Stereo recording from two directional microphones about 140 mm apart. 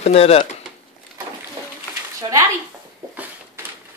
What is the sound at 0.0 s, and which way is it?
Speech, 45° left (ahead or behind).